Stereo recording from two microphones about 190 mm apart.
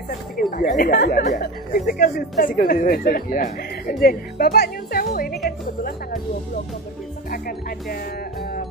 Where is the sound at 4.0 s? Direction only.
50° left (ahead or behind).